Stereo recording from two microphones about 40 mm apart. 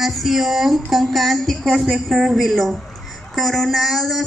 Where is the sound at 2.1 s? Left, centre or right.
Centre.